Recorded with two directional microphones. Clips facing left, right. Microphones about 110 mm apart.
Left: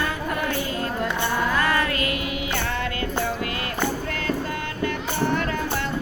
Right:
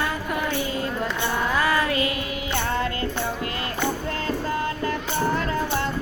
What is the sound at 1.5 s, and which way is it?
Music, 15° right (ahead or behind).